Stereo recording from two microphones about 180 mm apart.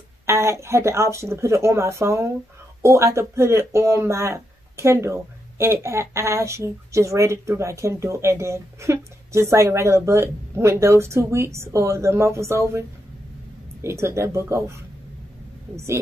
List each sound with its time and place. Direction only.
0.3 s speech: 15° right (ahead or behind)
15.7 s speech: 15° right (ahead or behind)